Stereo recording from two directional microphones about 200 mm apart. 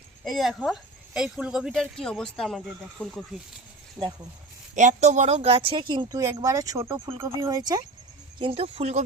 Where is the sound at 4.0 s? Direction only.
20° right (ahead or behind).